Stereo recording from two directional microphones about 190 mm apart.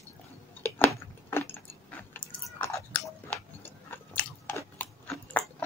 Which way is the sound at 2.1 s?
10° left (ahead or behind).